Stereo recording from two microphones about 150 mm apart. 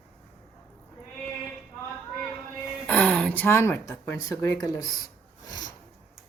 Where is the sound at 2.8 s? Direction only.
10° left (ahead or behind); by 5.1 s 25° left (ahead or behind).